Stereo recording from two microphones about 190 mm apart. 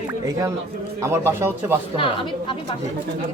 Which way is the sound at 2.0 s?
25° left (ahead or behind).